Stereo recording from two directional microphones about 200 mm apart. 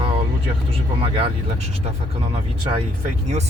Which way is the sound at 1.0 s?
25° right (ahead or behind).